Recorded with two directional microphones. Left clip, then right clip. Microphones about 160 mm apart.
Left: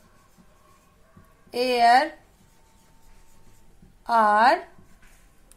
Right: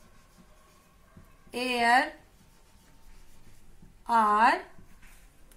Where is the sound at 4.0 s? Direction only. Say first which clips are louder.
Left 4 dB; 65° left (ahead or behind).